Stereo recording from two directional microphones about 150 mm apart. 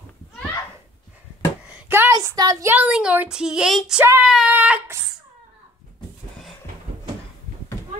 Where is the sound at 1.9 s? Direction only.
15° right (ahead or behind).